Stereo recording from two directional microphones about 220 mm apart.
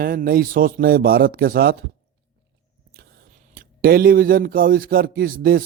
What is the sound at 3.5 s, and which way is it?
A man's voice, 40° right (ahead or behind).